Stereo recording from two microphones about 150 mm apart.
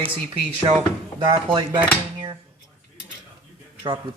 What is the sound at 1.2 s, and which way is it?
Speech, 35° right (ahead or behind).